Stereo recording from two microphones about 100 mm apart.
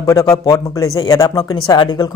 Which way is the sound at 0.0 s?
35° left (ahead or behind).